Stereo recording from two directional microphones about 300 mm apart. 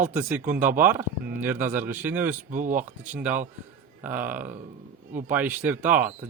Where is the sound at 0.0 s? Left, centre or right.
Centre.